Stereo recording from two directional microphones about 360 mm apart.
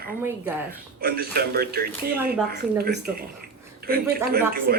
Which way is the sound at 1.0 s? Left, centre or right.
Right.